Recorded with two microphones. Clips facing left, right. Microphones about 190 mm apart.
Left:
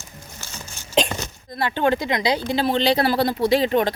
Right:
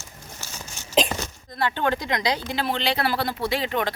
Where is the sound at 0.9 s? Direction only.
Centre (ahead or behind).